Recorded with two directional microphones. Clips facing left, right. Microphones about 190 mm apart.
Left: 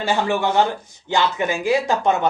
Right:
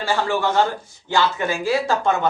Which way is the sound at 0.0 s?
20° left (ahead or behind).